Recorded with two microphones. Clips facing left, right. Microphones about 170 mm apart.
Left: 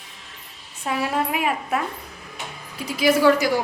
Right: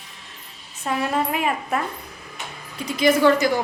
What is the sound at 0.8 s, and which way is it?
A woman's voice, 5° left (ahead or behind).